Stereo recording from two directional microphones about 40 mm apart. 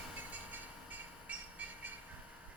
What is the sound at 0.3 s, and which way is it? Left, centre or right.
Train, right.